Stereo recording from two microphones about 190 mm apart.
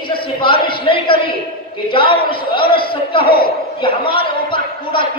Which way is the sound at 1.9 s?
25° left (ahead or behind).